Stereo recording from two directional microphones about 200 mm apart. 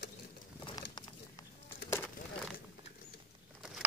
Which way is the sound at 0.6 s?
20° left (ahead or behind).